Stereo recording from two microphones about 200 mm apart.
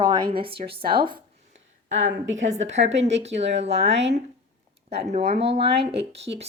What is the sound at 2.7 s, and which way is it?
Speech, 35° right (ahead or behind).